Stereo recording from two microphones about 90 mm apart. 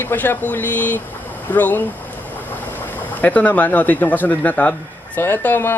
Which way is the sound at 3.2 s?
20° left (ahead or behind).